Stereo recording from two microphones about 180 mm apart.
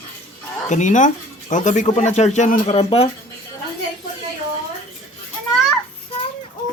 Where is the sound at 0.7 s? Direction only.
45° left (ahead or behind).